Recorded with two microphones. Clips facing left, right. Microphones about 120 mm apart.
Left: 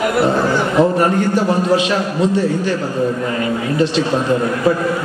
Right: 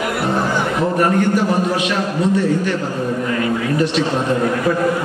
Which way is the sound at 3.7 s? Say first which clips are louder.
Left 3 dB; 25° left (ahead or behind).